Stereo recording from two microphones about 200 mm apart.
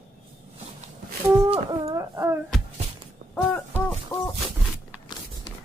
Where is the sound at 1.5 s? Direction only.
30° right (ahead or behind).